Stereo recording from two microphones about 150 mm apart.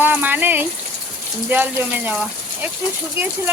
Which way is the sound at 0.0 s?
10° right (ahead or behind).